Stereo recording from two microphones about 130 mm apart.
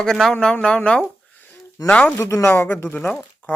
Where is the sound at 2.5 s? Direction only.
10° left (ahead or behind).